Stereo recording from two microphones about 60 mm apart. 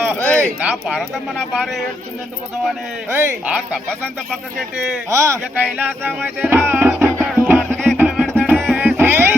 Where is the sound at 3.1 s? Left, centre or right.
Right.